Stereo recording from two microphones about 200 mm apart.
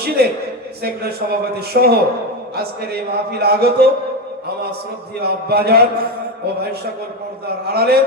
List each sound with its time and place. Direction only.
0.2 s a man's voice: 50° right (ahead or behind)
5.2 s a man's voice: 50° right (ahead or behind)
7.4 s a man's voice: 50° right (ahead or behind)